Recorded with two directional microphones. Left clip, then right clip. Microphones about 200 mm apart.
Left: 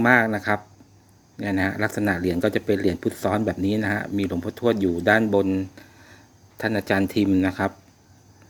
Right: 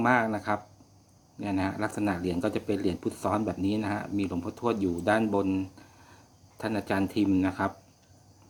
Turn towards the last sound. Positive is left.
turn(degrees=25)  # may be behind; listen again after turning